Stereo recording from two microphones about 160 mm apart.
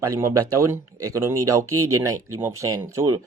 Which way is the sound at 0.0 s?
20° right (ahead or behind).